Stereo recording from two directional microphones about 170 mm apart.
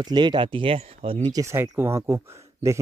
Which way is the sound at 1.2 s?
20° right (ahead or behind).